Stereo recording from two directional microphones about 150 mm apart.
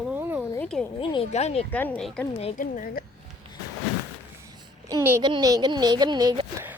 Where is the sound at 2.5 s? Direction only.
65° left (ahead or behind).